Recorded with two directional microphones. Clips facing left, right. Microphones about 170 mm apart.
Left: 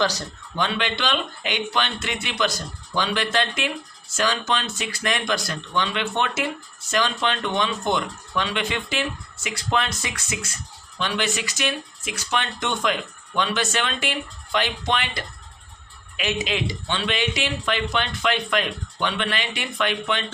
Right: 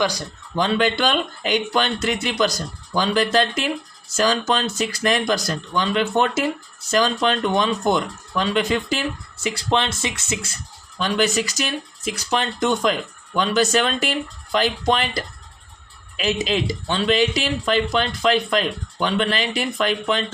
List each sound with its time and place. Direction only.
0.0 s speech: 15° right (ahead or behind)
0.5 s speech: 40° right (ahead or behind)
11.0 s speech: 40° right (ahead or behind)